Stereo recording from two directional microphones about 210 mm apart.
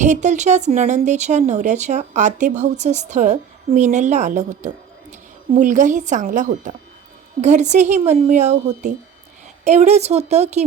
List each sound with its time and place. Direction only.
0.0 s speech: 35° right (ahead or behind)